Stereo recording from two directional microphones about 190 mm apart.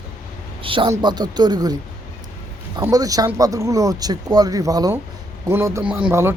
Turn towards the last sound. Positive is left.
turn(degrees=-10)  # may be behind; listen again after turning